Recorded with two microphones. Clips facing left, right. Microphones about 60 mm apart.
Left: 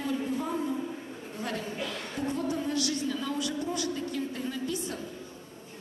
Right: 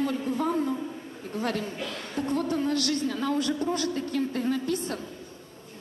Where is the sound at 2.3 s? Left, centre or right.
Right.